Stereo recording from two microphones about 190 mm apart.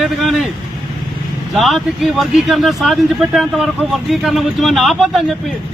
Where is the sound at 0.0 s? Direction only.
Centre (ahead or behind).